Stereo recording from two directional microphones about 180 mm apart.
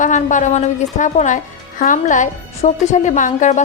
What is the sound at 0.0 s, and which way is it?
A woman's voice, 45° left (ahead or behind).